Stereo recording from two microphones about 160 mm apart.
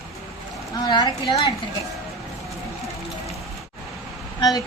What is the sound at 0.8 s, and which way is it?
Speech, 25° left (ahead or behind).